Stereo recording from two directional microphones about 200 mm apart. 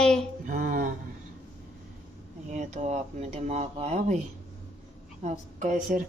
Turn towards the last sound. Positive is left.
turn(degrees=-40)  # may be behind; listen again after turning